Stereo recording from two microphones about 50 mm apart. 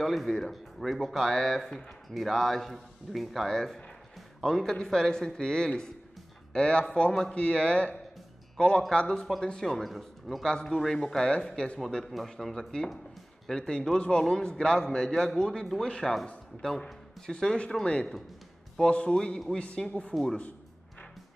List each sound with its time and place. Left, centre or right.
0.0 s a man's voice: centre
9.8 s a man's voice: centre
10.4 s a man's voice: centre
12.1 s a man's voice: centre
13.5 s a man's voice: centre